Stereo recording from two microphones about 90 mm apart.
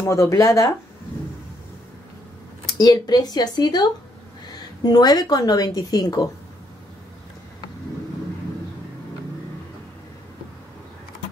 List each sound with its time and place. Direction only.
0.0 s speech: 35° left (ahead or behind)
2.8 s speech: 50° left (ahead or behind)